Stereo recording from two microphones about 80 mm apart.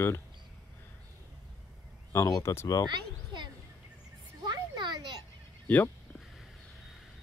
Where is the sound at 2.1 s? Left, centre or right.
Left.